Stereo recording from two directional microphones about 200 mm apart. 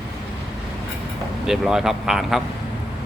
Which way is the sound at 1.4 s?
Centre (ahead or behind).